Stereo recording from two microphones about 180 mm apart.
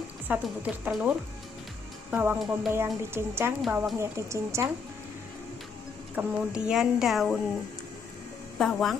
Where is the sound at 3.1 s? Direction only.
15° right (ahead or behind).